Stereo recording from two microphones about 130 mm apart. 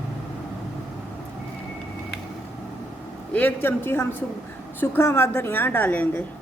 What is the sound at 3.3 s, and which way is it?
A woman's voice, 15° left (ahead or behind).